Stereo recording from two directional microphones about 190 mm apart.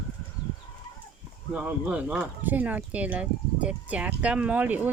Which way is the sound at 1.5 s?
5° right (ahead or behind).